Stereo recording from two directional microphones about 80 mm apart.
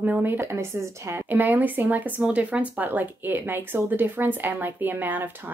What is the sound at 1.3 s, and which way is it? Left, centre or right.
Speech, right.